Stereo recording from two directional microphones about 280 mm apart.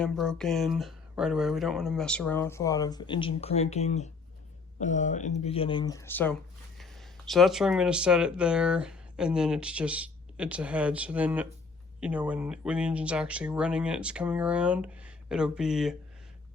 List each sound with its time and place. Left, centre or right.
0.0 s speech: centre